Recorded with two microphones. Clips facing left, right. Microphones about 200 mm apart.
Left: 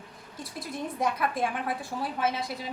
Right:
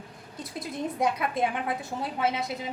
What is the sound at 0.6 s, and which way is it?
A woman's voice, 20° right (ahead or behind).